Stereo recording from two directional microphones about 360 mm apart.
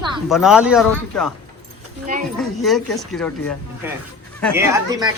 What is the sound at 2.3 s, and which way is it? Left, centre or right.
Speech, centre.